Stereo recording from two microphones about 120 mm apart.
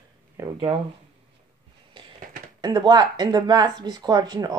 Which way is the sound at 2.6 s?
35° right (ahead or behind).